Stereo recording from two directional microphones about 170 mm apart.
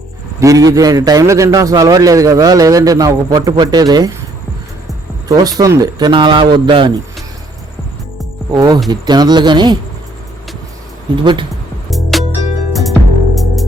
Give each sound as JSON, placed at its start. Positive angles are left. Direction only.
{"t": 0.3, "sound": "a man's voice", "side_deg": -20}
{"t": 5.3, "sound": "a man's voice", "side_deg": -20}
{"t": 8.4, "sound": "a man's voice", "side_deg": -20}
{"t": 11.2, "sound": "a man's voice", "side_deg": -30}
{"t": 11.9, "sound": "music", "side_deg": 0}